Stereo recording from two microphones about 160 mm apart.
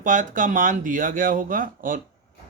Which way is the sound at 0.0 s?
55° right (ahead or behind).